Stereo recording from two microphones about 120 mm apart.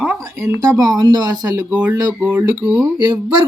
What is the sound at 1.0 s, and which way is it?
Speech, 35° right (ahead or behind).